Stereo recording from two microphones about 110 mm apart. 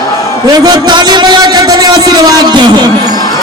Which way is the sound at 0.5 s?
40° right (ahead or behind).